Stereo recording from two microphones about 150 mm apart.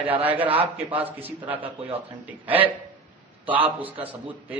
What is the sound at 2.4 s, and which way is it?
A man's voice, 10° right (ahead or behind).